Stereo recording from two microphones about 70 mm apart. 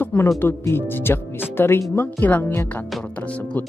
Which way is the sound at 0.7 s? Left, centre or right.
Left.